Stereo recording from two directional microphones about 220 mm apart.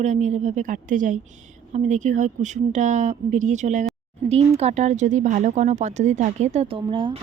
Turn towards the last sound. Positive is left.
turn(degrees=-25)  # may be behind; listen again after turning